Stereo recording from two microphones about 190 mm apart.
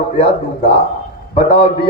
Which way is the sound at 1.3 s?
30° left (ahead or behind).